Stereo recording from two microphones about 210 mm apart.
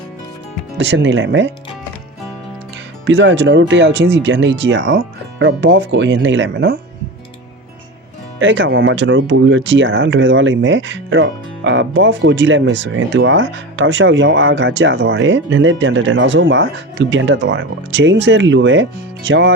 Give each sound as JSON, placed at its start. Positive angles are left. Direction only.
{"t": 0.8, "sound": "speech", "side_deg": -60}
{"t": 3.1, "sound": "speech", "side_deg": -60}
{"t": 8.4, "sound": "speech", "side_deg": -60}